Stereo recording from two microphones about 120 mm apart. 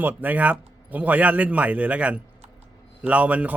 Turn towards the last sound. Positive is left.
turn(degrees=-15)  # may be behind; listen again after turning